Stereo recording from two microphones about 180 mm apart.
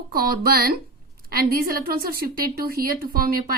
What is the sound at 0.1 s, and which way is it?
A woman's voice, 55° right (ahead or behind).